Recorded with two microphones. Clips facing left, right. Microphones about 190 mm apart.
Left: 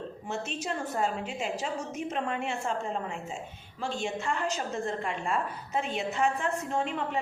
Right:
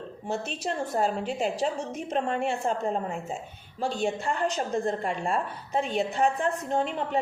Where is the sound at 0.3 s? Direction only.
35° right (ahead or behind).